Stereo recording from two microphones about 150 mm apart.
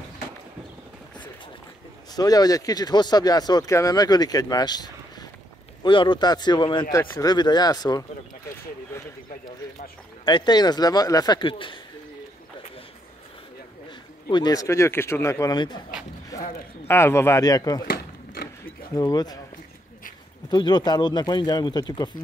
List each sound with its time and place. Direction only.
2.1 s speech: 25° left (ahead or behind)
10.2 s speech: 30° left (ahead or behind)
14.3 s speech: 25° left (ahead or behind)
16.8 s speech: 15° left (ahead or behind)
17.8 s a sound: 90° left
18.9 s speech: 25° left (ahead or behind)
20.4 s speech: 30° left (ahead or behind)